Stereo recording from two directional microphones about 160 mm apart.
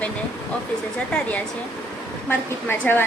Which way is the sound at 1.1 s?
10° left (ahead or behind).